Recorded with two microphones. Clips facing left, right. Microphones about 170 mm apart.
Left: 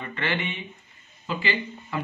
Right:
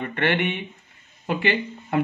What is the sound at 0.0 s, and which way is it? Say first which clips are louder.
Speech: right 6 dB; 60° right (ahead or behind).